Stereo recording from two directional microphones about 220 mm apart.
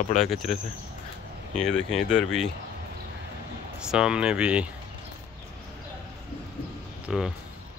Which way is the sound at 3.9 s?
5° right (ahead or behind).